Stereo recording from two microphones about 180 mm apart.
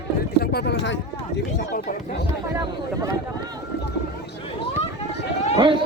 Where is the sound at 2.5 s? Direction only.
20° right (ahead or behind).